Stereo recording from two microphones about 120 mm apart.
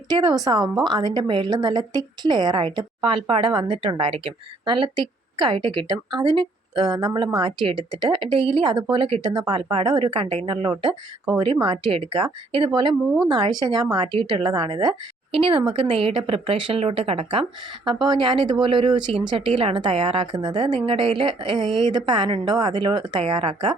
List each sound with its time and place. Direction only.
0.1 s speech: 35° right (ahead or behind); by 17.4 s 50° right (ahead or behind)
17.8 s speech: 40° right (ahead or behind)
23.2 s speech: 50° right (ahead or behind)